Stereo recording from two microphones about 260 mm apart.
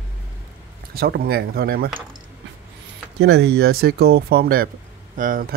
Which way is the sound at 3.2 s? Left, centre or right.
Right.